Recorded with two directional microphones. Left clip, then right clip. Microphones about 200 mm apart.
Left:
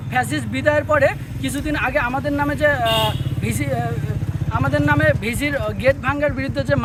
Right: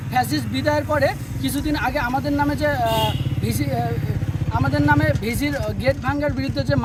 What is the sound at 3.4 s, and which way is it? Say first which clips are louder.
Speech: left 1 dB; 30° left (ahead or behind).